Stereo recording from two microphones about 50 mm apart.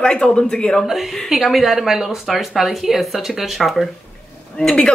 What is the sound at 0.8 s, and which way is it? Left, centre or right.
A woman's voice, centre.